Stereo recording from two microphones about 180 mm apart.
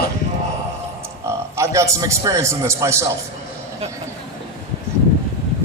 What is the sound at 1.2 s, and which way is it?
A man's voice, 15° right (ahead or behind).